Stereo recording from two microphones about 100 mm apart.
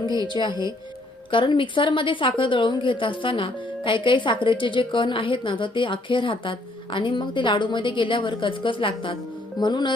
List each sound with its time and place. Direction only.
0.2 s a woman's voice: 50° left (ahead or behind)